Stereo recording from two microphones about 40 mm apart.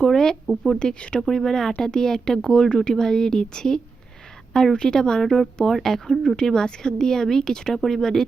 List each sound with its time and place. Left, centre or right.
0.0 s speech: centre
1.3 s speech: centre
7.7 s speech: centre